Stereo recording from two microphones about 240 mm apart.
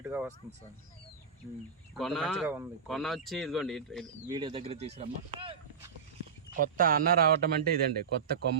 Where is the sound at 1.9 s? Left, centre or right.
Centre.